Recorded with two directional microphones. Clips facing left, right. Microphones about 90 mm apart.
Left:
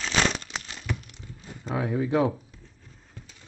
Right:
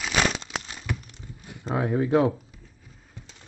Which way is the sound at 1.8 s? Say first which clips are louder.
Right 3 dB; 35° right (ahead or behind).